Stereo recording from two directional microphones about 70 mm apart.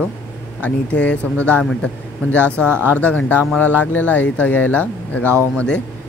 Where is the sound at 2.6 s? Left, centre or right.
Right.